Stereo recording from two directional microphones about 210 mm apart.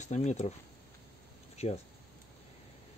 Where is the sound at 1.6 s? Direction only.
30° left (ahead or behind).